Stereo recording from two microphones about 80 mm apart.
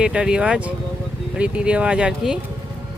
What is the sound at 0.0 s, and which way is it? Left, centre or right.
Speech, centre.